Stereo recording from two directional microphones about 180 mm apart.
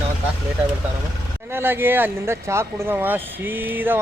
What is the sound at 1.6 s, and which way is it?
Speech, 10° right (ahead or behind).